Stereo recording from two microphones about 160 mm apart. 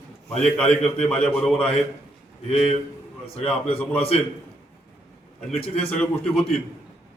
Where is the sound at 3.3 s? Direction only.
40° left (ahead or behind).